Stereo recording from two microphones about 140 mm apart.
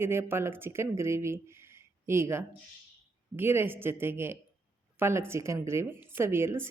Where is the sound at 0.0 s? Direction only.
15° right (ahead or behind).